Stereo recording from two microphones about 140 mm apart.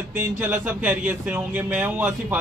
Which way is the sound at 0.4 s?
10° right (ahead or behind).